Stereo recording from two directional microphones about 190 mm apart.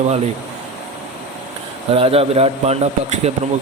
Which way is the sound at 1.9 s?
30° right (ahead or behind).